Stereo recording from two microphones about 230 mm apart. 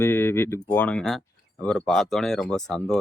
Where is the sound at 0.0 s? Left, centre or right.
Centre.